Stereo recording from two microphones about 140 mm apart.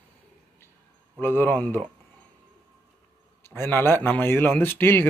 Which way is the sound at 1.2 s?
15° left (ahead or behind).